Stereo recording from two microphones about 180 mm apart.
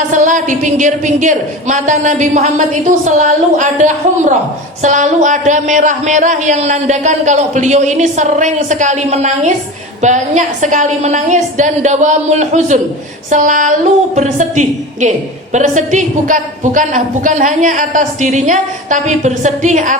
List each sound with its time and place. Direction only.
0.1 s a woman's voice: 45° right (ahead or behind)